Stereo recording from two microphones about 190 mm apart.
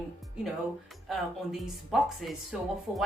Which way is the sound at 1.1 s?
Centre (ahead or behind).